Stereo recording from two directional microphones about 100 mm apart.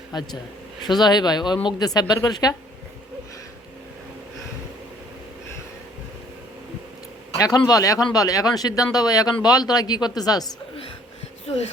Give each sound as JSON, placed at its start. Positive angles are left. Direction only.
{"t": 0.1, "sound": "speech", "side_deg": 45}
{"t": 7.3, "sound": "speech", "side_deg": 35}